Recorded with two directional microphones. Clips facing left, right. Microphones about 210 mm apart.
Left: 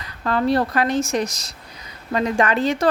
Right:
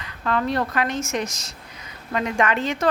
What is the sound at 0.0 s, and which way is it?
A woman's voice, 35° left (ahead or behind).